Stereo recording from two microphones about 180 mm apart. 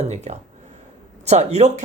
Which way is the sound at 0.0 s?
40° right (ahead or behind).